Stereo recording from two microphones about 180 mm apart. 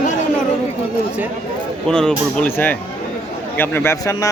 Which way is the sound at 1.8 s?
5° left (ahead or behind).